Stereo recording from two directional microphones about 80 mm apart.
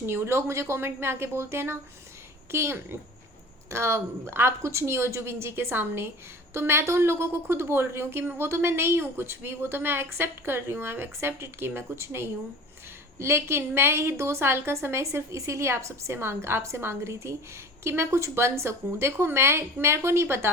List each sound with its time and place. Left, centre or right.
0.0 s a woman's voice: right